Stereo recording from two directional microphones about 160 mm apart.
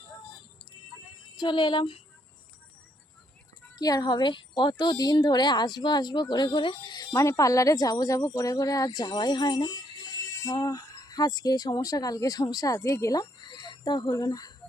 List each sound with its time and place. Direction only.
1.4 s speech: 30° left (ahead or behind)
3.8 s speech: 25° left (ahead or behind)